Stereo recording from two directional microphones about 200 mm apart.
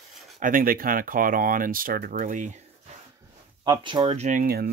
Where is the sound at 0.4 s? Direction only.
45° right (ahead or behind).